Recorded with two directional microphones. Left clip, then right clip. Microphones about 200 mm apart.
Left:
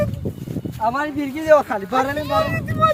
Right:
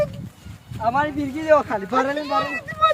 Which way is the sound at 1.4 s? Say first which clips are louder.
Left 3 dB; 55° left (ahead or behind).